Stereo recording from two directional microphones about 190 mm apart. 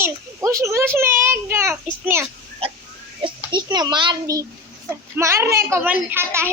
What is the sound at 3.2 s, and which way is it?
A child's voice, 25° right (ahead or behind).